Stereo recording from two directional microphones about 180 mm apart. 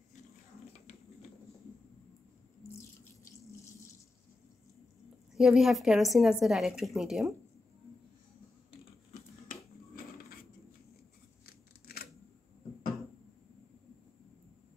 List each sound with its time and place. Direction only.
5.3 s a woman's voice: centre (ahead or behind)